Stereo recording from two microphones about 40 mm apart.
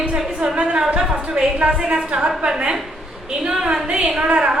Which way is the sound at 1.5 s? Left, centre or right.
Right.